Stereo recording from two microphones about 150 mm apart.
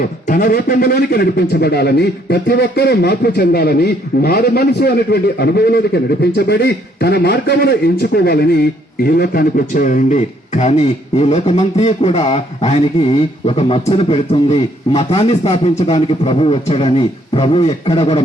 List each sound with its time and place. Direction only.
0.0 s a man's voice: 70° left (ahead or behind); by 18.2 s 35° left (ahead or behind)